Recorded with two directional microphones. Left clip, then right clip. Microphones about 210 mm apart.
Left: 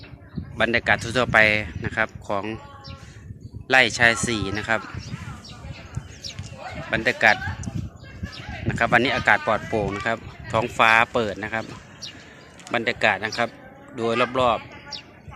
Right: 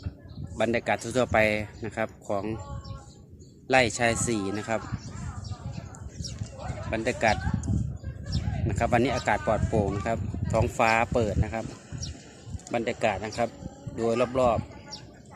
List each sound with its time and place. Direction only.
0.5 s speech: centre (ahead or behind)
3.7 s speech: centre (ahead or behind)
6.2 s a sound: 30° right (ahead or behind)
6.9 s speech: centre (ahead or behind)
8.6 s speech: centre (ahead or behind)
12.7 s speech: centre (ahead or behind)